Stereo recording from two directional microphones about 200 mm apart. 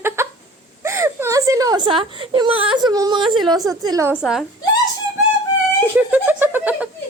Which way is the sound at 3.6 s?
15° right (ahead or behind).